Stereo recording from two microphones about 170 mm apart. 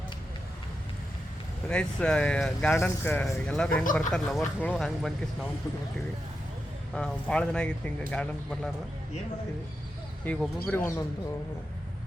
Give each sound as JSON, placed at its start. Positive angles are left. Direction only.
{"t": 1.7, "sound": "speech", "side_deg": 5}
{"t": 6.9, "sound": "speech", "side_deg": 5}
{"t": 10.3, "sound": "speech", "side_deg": 10}